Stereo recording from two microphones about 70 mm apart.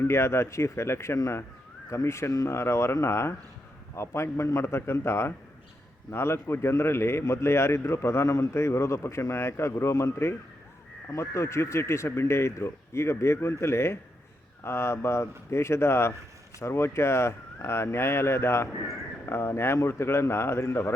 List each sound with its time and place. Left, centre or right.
0.0 s a man's voice: left